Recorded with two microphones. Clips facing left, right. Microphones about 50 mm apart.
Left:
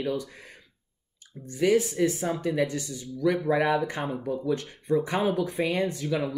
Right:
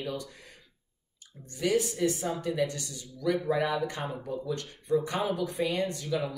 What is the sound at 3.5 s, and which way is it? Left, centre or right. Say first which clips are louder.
Speech: left 5 dB; left.